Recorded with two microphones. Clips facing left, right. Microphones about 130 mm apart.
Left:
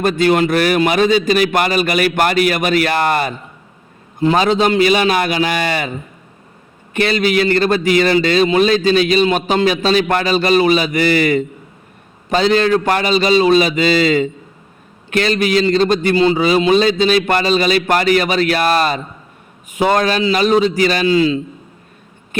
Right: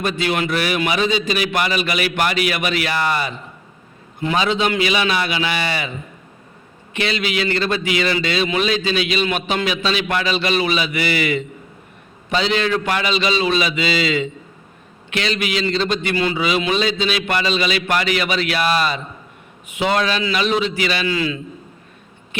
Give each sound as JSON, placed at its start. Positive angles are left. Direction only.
{"t": 0.0, "sound": "a man's voice", "side_deg": 45}
{"t": 4.2, "sound": "a man's voice", "side_deg": 40}
{"t": 6.9, "sound": "a man's voice", "side_deg": 45}
{"t": 21.1, "sound": "a man's voice", "side_deg": 30}